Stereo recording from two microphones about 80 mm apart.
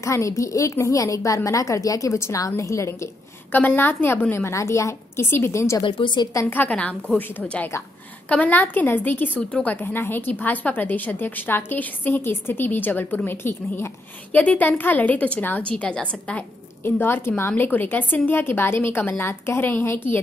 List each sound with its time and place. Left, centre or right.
0.0 s a woman's voice: left
3.5 s a woman's voice: left
5.8 s a woman's voice: left
6.4 s a woman's voice: centre
16.8 s a woman's voice: left